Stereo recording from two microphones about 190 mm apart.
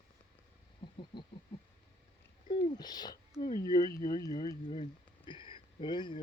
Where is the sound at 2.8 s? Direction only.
20° left (ahead or behind).